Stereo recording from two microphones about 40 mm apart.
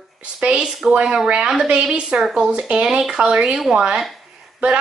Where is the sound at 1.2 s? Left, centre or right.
Right.